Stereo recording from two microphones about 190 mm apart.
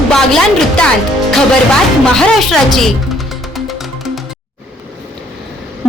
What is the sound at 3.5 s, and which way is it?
Music, centre (ahead or behind).